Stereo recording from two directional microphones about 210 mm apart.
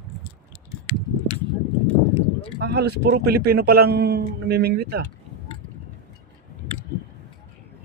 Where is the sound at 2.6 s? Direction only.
50° right (ahead or behind).